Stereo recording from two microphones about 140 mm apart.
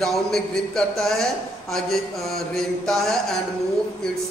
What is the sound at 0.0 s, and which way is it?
A man's voice, 5° left (ahead or behind).